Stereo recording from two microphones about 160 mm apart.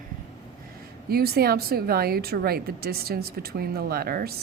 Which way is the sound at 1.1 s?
75° right (ahead or behind).